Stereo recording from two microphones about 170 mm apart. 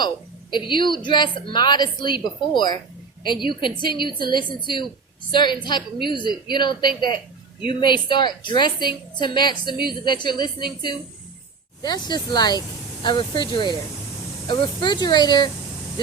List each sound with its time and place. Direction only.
0.5 s speech: 30° left (ahead or behind)